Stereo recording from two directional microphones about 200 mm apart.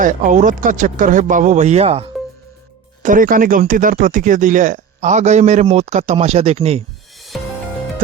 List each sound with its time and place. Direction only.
0.0 s speech: 40° right (ahead or behind)
3.0 s speech: 40° right (ahead or behind)